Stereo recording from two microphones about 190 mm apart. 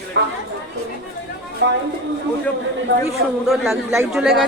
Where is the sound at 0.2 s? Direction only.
65° right (ahead or behind).